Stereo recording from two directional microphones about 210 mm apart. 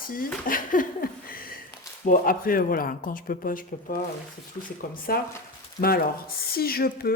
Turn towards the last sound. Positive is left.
turn(degrees=45)  # may be behind; listen again after turning